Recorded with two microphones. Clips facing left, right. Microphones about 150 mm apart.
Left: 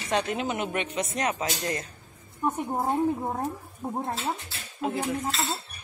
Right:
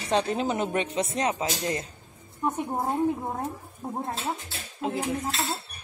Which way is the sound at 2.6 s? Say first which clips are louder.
Left 1 dB; centre (ahead or behind).